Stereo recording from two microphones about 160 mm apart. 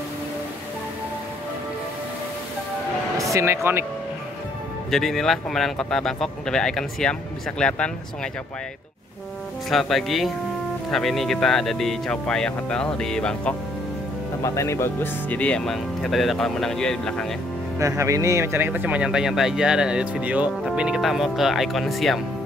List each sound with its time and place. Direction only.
3.2 s speech: 20° right (ahead or behind)
4.9 s speech: centre (ahead or behind)
9.7 s speech: centre (ahead or behind)
14.4 s speech: 20° left (ahead or behind)
17.7 s speech: 20° right (ahead or behind); by 22.2 s centre (ahead or behind)